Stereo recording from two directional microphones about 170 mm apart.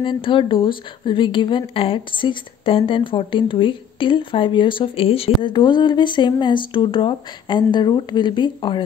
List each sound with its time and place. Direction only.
0.0 s a woman's voice: 30° left (ahead or behind)